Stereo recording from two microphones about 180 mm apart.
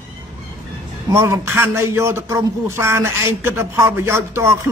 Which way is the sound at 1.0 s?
15° right (ahead or behind).